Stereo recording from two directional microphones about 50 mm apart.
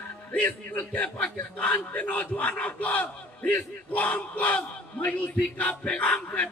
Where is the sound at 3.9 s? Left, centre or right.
Left.